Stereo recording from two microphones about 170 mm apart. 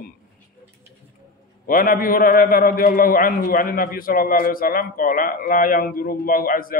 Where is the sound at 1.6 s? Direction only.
55° left (ahead or behind).